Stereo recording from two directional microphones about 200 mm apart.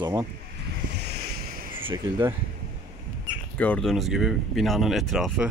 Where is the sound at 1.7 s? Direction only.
25° right (ahead or behind).